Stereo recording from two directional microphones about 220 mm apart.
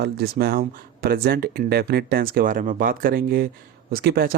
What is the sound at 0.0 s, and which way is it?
Speech, 45° right (ahead or behind).